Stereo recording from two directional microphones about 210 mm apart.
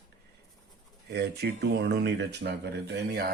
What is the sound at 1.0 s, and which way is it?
Speech, 50° right (ahead or behind).